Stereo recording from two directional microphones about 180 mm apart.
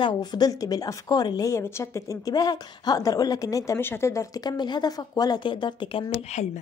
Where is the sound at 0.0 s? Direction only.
25° left (ahead or behind).